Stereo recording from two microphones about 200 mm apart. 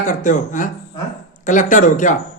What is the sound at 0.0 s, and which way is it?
A man's voice, 40° left (ahead or behind).